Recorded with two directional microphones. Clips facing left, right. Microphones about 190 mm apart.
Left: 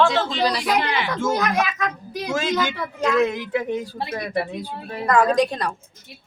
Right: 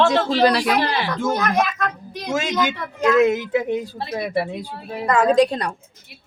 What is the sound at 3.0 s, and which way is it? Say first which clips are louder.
Speech: right 4 dB; 10° right (ahead or behind).